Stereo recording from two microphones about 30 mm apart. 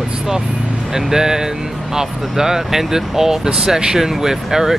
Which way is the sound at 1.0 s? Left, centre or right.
Centre.